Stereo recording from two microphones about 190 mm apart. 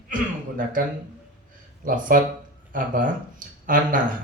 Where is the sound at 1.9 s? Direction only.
45° right (ahead or behind).